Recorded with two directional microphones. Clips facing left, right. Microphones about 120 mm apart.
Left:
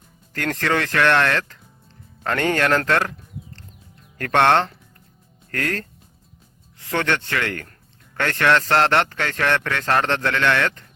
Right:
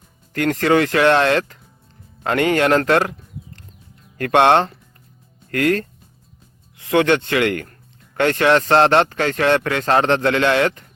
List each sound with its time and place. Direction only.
0.3 s speech: 15° right (ahead or behind)
4.2 s a man's voice: 15° right (ahead or behind)